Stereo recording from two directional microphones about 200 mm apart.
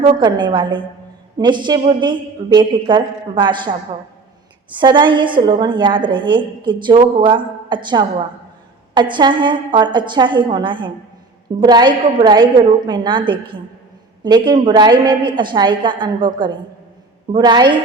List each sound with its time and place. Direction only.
0.0 s a woman's voice: 20° right (ahead or behind)
4.7 s a woman's voice: 25° right (ahead or behind)